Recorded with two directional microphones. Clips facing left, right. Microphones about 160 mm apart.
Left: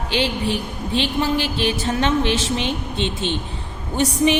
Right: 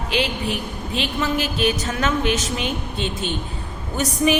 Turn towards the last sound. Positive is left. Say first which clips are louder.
# left 2 dB
turn(degrees=25)  # may be behind; listen again after turning